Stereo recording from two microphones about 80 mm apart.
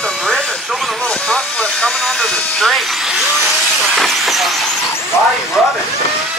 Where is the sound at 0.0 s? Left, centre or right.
Centre.